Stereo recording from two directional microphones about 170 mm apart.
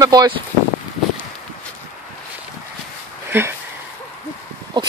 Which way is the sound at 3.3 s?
15° right (ahead or behind).